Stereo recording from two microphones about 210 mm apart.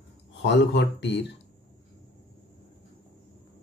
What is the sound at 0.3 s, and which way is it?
Speech, 55° left (ahead or behind).